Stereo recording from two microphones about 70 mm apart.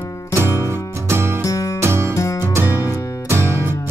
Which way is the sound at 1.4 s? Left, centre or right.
Left.